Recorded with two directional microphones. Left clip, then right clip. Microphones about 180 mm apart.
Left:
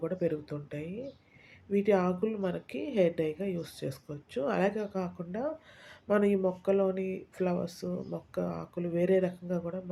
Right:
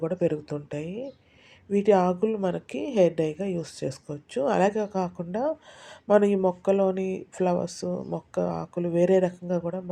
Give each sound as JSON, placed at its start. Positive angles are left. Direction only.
{"t": 0.0, "sound": "a woman's voice", "side_deg": -30}